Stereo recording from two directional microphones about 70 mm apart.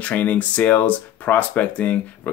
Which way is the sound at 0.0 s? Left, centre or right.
Left.